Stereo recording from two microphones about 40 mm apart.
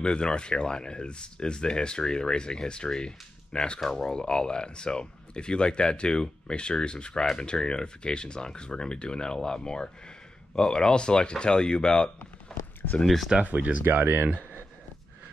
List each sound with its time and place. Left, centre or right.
0.0 s speech: left
13.0 s speech: centre
13.5 s speech: right
13.8 s speech: right